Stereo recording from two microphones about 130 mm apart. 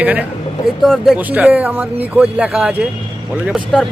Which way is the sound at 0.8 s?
5° left (ahead or behind).